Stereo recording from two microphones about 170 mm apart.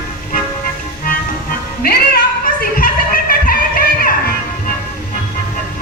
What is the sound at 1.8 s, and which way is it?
Music, 65° left (ahead or behind).